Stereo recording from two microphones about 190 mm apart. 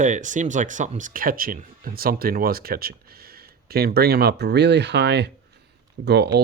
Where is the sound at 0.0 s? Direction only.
40° right (ahead or behind).